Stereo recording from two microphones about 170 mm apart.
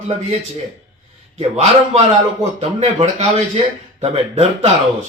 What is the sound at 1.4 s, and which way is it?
A man's voice, 35° right (ahead or behind).